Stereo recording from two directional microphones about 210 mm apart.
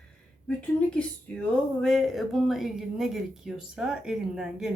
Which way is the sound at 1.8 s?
Centre (ahead or behind).